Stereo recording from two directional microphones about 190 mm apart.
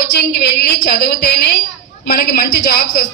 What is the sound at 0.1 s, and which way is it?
A woman's voice, 60° left (ahead or behind).